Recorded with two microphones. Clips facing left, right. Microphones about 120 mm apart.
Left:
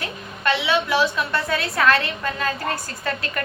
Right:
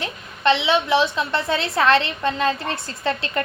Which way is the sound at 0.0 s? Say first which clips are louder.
Right 4 dB; 25° right (ahead or behind).